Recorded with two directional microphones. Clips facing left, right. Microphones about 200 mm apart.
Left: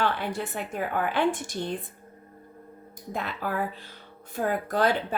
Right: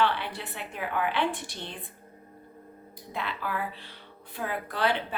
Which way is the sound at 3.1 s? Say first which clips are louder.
Left 3 dB; 45° left (ahead or behind).